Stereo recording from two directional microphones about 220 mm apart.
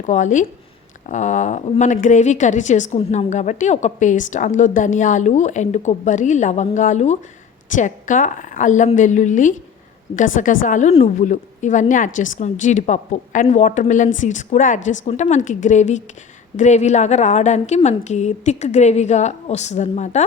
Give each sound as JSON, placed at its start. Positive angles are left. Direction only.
{"t": 0.0, "sound": "a woman's voice", "side_deg": 35}